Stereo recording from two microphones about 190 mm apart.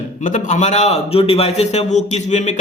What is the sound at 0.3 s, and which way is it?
A man's voice, 40° left (ahead or behind).